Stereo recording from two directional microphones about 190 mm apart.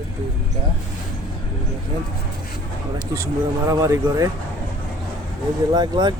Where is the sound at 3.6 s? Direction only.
15° right (ahead or behind).